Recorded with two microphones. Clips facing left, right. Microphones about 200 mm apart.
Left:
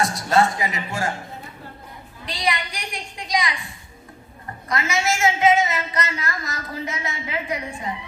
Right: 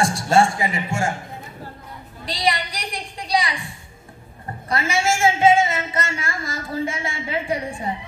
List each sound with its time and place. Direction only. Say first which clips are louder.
0.0 s a woman's voice: right 2 dB; 30° right (ahead or behind)
2.2 s a woman's voice: right 2 dB; 35° right (ahead or behind)
4.6 s a woman's voice: right 2 dB; 30° right (ahead or behind)